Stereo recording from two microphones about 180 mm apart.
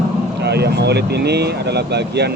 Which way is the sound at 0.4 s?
65° right (ahead or behind).